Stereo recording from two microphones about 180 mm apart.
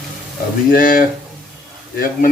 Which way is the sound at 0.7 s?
50° left (ahead or behind).